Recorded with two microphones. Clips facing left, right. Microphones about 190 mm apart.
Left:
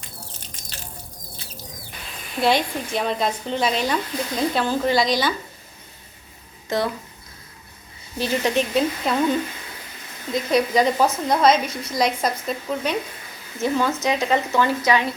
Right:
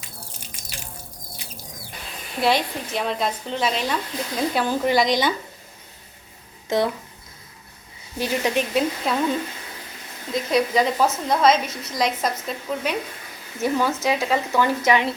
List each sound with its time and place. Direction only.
0.0 s sine wave: 10° right (ahead or behind)
2.4 s speech: centre (ahead or behind)
4.5 s speech: 10° right (ahead or behind)
6.7 s speech: 20° right (ahead or behind)
8.2 s speech: 10° right (ahead or behind)
10.3 s speech: centre (ahead or behind)
14.8 s speech: 25° right (ahead or behind)